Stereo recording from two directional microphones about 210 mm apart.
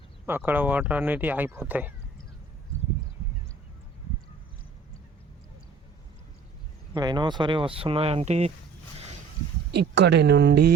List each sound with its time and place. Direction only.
0.3 s speech: 10° right (ahead or behind)
6.9 s speech: 20° right (ahead or behind)
9.9 s speech: 55° right (ahead or behind)